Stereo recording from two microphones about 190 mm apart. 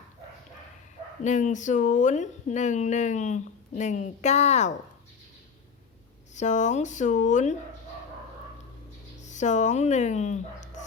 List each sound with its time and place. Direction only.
1.2 s speech: 40° left (ahead or behind)
6.3 s speech: 40° left (ahead or behind)
9.2 s speech: 40° left (ahead or behind)